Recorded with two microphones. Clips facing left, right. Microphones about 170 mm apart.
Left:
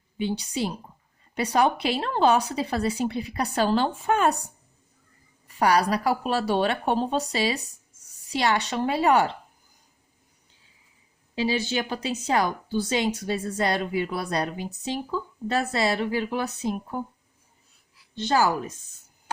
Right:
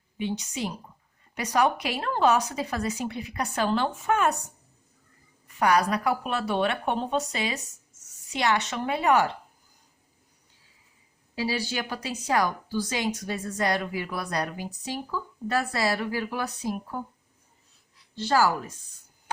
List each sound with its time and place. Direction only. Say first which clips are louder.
0.2 s a woman's voice: left 3 dB; 30° left (ahead or behind)
5.5 s a woman's voice: left 1 dB; 35° left (ahead or behind)
11.3 s a woman's voice: left 4 dB; 20° left (ahead or behind)
18.1 s a woman's voice: left 1 dB; 20° left (ahead or behind)